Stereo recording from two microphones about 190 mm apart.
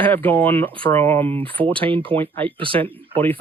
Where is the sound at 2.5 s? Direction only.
25° right (ahead or behind).